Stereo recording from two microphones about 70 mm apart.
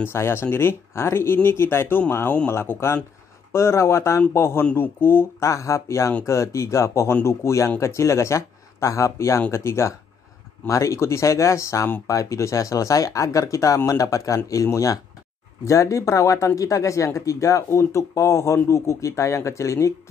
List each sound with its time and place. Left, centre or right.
0.0 s speech: left
5.5 s speech: left